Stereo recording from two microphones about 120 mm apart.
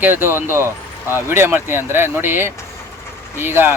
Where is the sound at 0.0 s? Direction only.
20° right (ahead or behind).